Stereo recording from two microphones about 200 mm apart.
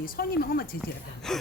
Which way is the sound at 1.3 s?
Centre (ahead or behind).